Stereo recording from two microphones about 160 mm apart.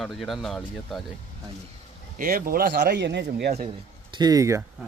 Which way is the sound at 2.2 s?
65° right (ahead or behind).